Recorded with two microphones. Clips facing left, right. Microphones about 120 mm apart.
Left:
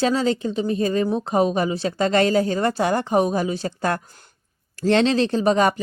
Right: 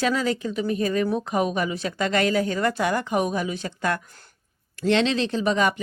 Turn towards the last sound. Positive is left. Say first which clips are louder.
# left 4 dB
turn(degrees=40)  # may be behind; listen again after turning